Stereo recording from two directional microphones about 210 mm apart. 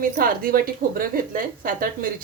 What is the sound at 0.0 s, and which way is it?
A woman's voice, 45° right (ahead or behind).